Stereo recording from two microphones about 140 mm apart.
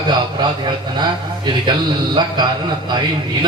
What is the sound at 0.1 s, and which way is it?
A man's voice, 30° right (ahead or behind).